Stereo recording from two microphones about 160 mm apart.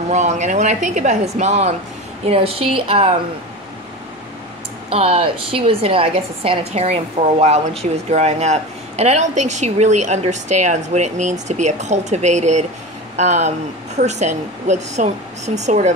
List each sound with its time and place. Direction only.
0.1 s a woman's voice: 45° right (ahead or behind)
4.8 s a woman's voice: 35° right (ahead or behind)